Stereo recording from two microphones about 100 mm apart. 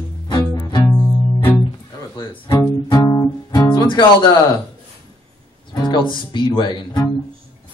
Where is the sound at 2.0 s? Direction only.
35° left (ahead or behind).